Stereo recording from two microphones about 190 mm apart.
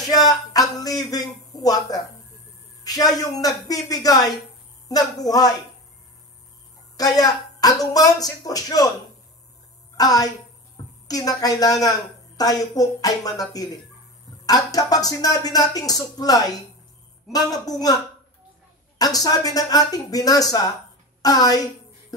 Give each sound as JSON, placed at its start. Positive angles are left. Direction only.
{"t": 0.1, "sound": "a woman's voice", "side_deg": 20}
{"t": 7.0, "sound": "speech", "side_deg": 20}
{"t": 9.9, "sound": "speech", "side_deg": 20}
{"t": 18.9, "sound": "speech", "side_deg": 20}